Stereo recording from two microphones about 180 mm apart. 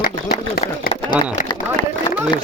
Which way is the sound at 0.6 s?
35° left (ahead or behind).